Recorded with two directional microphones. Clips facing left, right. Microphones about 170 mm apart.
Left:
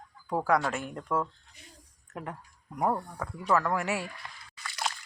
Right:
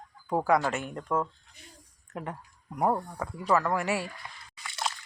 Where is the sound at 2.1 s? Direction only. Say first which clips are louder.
Right 2 dB; 5° right (ahead or behind).